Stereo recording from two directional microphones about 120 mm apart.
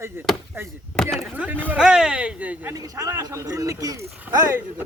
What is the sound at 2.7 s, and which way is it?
Speech, 30° right (ahead or behind).